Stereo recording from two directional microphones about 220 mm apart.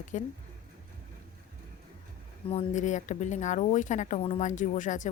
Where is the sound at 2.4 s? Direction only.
25° left (ahead or behind).